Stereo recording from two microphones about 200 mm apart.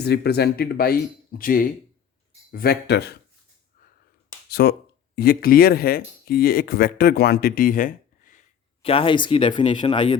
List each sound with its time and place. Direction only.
0.0 s speech: 55° left (ahead or behind)
4.4 s speech: 55° left (ahead or behind)
8.8 s speech: 25° left (ahead or behind)